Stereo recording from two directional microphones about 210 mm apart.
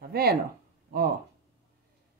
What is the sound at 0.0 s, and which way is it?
Speech, 50° right (ahead or behind).